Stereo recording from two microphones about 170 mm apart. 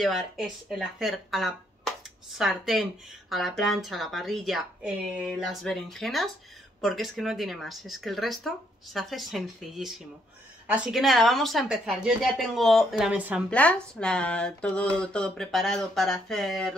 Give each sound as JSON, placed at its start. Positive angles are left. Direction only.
{"t": 0.0, "sound": "speech", "side_deg": 0}
{"t": 13.5, "sound": "speech", "side_deg": 5}